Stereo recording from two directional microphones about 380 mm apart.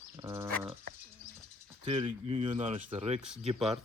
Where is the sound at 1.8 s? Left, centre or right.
Centre.